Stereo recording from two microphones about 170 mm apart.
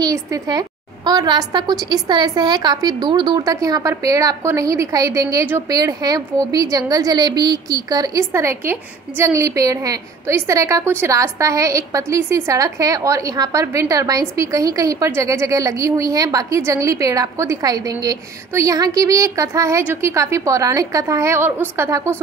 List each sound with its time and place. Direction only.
0.0 s a woman's voice: 20° right (ahead or behind)